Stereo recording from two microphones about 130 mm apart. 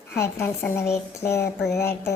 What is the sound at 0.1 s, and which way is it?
Speech, 20° left (ahead or behind).